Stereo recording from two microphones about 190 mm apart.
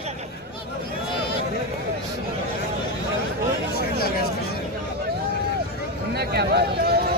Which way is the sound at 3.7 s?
55° left (ahead or behind).